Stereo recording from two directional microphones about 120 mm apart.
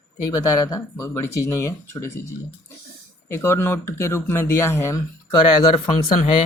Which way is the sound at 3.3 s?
20° left (ahead or behind).